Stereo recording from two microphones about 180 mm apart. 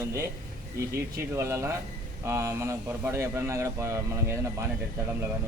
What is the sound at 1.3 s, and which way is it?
Speech, 15° right (ahead or behind).